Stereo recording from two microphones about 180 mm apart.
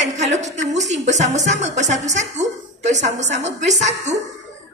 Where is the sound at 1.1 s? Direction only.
40° right (ahead or behind).